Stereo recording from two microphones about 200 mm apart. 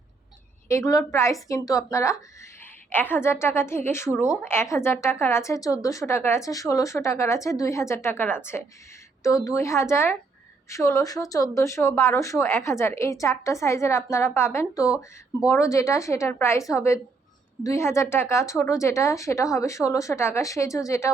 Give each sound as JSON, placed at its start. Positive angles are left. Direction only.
{"t": 0.7, "sound": "a woman's voice", "side_deg": 15}
{"t": 14.8, "sound": "speech", "side_deg": -5}
{"t": 15.4, "sound": "a woman's voice", "side_deg": 15}